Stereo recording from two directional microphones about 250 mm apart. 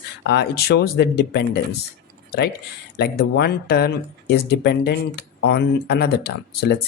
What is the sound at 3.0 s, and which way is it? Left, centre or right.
Speech, left.